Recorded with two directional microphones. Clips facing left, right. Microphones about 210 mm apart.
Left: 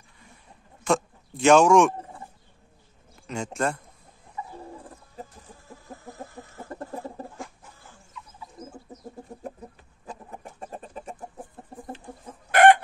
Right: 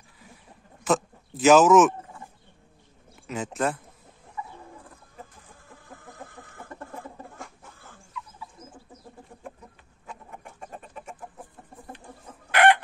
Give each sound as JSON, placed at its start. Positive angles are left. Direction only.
{"t": 0.8, "sound": "speech", "side_deg": -5}
{"t": 3.3, "sound": "speech", "side_deg": -5}
{"t": 4.6, "sound": "bird", "side_deg": 30}
{"t": 6.2, "sound": "chicken", "side_deg": -55}
{"t": 6.7, "sound": "chicken", "side_deg": 35}
{"t": 9.4, "sound": "chicken", "side_deg": 35}
{"t": 12.4, "sound": "chicken", "side_deg": 45}